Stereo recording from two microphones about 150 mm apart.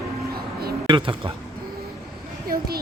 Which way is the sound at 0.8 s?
35° right (ahead or behind).